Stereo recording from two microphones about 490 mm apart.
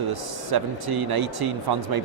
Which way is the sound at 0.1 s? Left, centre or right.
Right.